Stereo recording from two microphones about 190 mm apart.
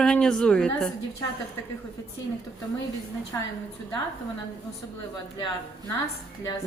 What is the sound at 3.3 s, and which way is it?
Speech, 15° left (ahead or behind).